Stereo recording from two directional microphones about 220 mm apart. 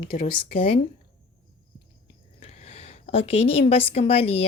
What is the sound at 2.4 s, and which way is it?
A woman's voice, 30° left (ahead or behind).